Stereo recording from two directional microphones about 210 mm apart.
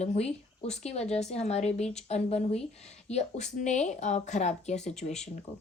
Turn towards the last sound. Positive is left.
turn(degrees=30)  # may be behind; listen again after turning